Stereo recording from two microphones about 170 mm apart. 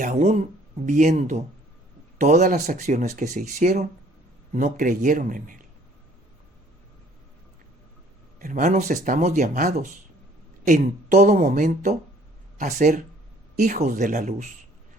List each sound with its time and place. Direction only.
0.0 s speech: 45° right (ahead or behind)
8.4 s speech: 50° right (ahead or behind)